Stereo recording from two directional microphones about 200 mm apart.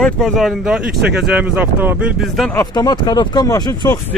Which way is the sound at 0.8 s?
55° right (ahead or behind).